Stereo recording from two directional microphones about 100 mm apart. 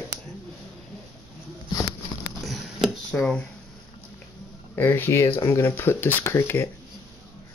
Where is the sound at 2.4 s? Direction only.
Centre (ahead or behind).